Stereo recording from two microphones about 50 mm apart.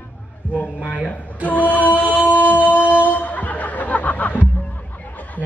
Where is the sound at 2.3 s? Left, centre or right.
Right.